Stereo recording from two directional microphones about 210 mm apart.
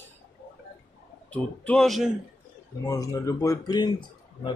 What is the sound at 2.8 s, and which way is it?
Speech, 15° left (ahead or behind).